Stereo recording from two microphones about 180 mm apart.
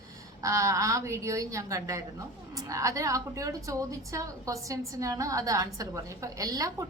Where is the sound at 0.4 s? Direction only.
15° right (ahead or behind).